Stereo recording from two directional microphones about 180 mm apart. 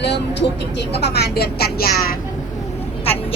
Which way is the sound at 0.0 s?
75° left (ahead or behind).